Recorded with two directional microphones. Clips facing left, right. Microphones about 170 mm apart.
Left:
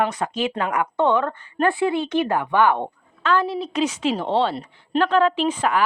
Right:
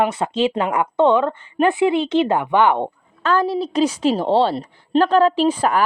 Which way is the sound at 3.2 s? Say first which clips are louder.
Right 3 dB; 40° right (ahead or behind).